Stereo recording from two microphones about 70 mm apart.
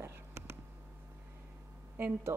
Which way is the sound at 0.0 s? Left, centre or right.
Right.